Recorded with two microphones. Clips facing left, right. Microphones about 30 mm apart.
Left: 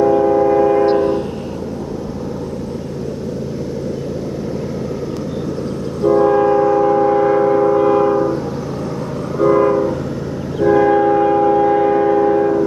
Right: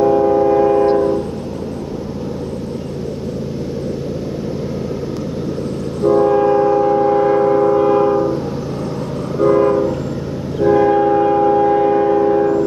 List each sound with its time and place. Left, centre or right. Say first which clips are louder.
0.0 s train: even; centre
0.9 s train: even; centre
6.0 s train: even; centre
9.4 s train: even; centre